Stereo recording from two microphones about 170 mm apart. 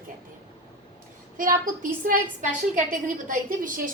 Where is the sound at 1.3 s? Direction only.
55° right (ahead or behind).